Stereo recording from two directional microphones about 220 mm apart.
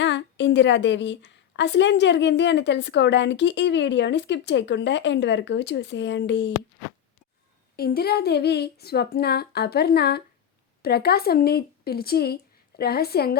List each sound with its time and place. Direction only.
0.0 s a woman's voice: 55° left (ahead or behind)
7.8 s a woman's voice: 45° left (ahead or behind)